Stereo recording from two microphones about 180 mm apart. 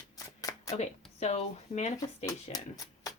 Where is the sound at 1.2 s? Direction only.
40° left (ahead or behind).